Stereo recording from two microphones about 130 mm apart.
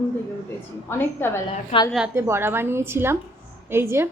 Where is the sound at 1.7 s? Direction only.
50° left (ahead or behind).